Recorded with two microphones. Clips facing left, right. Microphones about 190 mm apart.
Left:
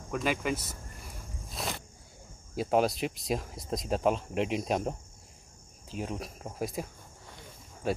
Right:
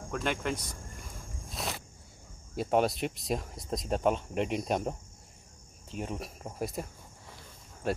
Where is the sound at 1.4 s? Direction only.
Centre (ahead or behind).